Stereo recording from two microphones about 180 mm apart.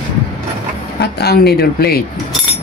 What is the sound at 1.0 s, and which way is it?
Speech, 65° left (ahead or behind).